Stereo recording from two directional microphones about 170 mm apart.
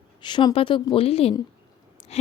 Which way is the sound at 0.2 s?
25° left (ahead or behind).